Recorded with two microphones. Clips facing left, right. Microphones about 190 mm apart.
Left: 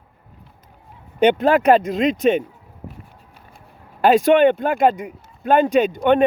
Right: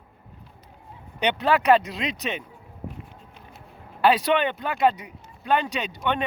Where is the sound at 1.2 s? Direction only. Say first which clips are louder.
Left 8 dB; 50° left (ahead or behind).